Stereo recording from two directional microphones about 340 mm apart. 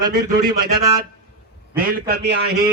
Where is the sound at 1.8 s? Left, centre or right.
Right.